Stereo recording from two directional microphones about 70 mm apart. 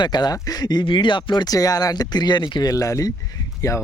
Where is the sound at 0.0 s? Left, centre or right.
Left.